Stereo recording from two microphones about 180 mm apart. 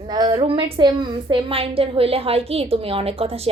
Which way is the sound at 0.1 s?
25° right (ahead or behind).